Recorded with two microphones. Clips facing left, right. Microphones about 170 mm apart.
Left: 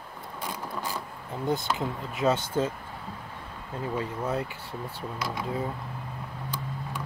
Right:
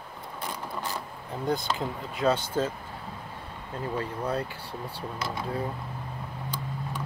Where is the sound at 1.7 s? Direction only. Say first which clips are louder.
Left 1 dB; 20° left (ahead or behind).